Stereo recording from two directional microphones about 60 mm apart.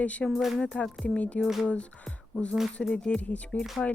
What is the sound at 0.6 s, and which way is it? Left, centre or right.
Speech, centre.